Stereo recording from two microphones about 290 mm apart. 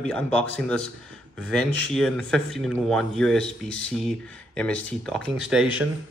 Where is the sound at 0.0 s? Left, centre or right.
Centre.